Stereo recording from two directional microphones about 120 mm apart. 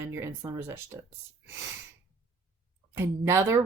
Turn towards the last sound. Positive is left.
turn(degrees=-20)  # may be behind; listen again after turning